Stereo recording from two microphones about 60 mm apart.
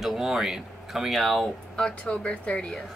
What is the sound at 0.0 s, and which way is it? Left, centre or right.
Speech, centre.